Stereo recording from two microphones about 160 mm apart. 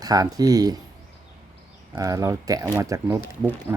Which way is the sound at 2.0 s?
20° right (ahead or behind).